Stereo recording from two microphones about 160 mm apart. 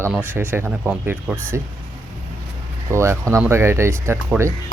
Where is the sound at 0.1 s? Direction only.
10° right (ahead or behind).